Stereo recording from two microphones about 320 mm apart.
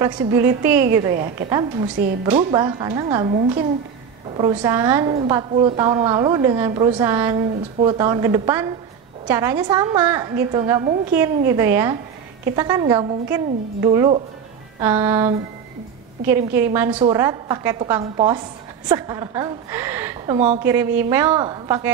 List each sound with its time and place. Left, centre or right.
0.0 s a woman's voice: centre